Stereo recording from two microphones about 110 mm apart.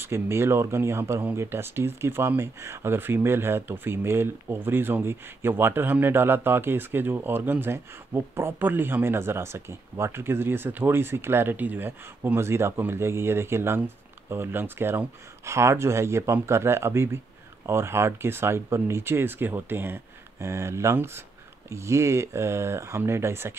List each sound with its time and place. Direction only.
0.0 s speech: 25° right (ahead or behind)